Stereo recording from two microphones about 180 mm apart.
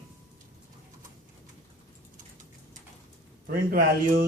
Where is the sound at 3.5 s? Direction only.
55° right (ahead or behind).